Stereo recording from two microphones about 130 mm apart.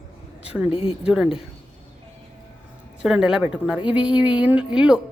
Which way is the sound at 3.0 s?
5° right (ahead or behind).